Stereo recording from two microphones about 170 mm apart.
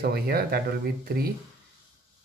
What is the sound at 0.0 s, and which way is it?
Speech, 65° right (ahead or behind).